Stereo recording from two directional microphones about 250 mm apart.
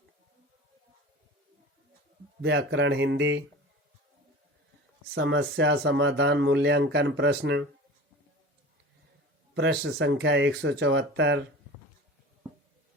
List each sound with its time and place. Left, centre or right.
2.4 s speech: right
5.1 s speech: right
9.6 s speech: right